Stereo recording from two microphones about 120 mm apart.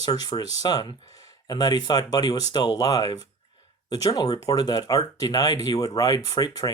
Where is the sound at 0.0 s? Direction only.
35° left (ahead or behind).